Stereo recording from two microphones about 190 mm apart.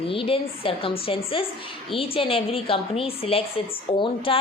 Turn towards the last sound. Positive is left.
turn(degrees=30)  # may be behind; listen again after turning